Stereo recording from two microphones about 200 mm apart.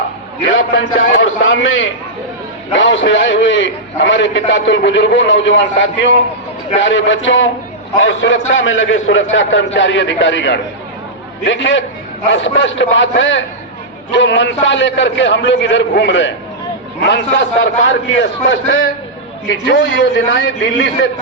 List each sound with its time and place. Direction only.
0.4 s a man's voice: 75° left (ahead or behind)
17.3 s a man's voice: 65° left (ahead or behind)
19.5 s a man's voice: 65° left (ahead or behind)